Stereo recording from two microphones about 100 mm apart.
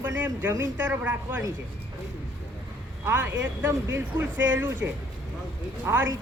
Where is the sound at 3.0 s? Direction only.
20° right (ahead or behind).